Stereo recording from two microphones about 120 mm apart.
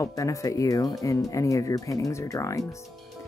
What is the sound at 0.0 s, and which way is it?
Speech, 25° left (ahead or behind).